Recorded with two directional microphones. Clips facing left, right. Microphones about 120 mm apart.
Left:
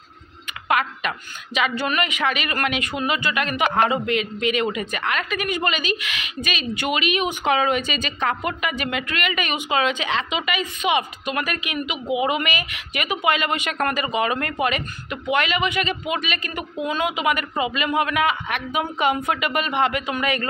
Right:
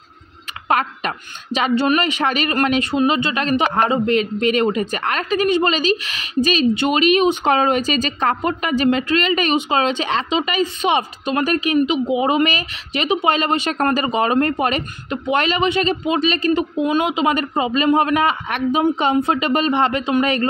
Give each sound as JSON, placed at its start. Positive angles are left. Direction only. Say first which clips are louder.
{"t": 0.7, "sound": "speech", "louder": "right 3 dB", "side_deg": -35}